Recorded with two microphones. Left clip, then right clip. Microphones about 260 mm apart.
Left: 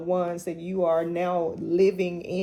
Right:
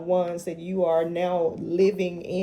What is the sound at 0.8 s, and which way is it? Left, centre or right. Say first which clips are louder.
Speech: right 1 dB; left.